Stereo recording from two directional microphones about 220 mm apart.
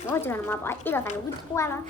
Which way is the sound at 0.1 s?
10° left (ahead or behind).